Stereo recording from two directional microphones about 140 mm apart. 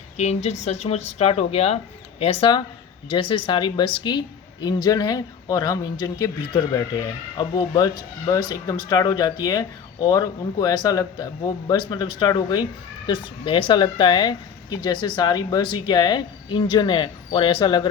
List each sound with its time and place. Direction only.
0.2 s speech: 55° left (ahead or behind); by 17.8 s 35° left (ahead or behind)